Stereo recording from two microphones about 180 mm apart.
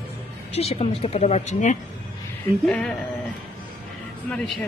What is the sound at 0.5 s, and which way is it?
Speech, 35° left (ahead or behind).